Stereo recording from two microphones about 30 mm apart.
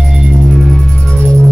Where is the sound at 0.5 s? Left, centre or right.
Centre.